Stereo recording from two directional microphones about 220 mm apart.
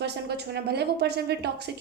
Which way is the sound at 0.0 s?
50° right (ahead or behind).